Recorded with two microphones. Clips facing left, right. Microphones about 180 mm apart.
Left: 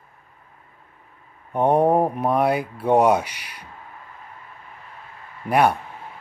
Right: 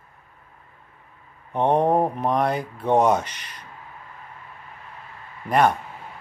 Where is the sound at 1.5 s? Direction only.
10° left (ahead or behind).